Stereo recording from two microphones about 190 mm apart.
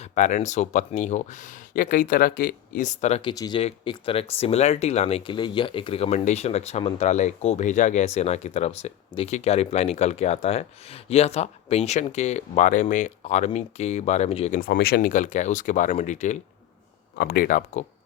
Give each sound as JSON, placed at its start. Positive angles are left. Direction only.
{"t": 0.0, "sound": "speech", "side_deg": 40}
{"t": 14.6, "sound": "speech", "side_deg": 55}